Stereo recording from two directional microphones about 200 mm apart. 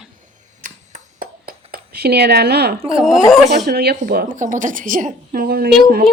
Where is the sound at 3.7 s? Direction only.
55° right (ahead or behind).